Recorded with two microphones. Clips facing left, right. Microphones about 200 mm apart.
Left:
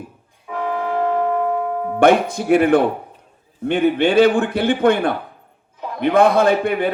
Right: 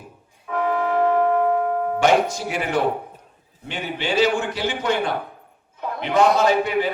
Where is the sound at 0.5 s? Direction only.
10° left (ahead or behind).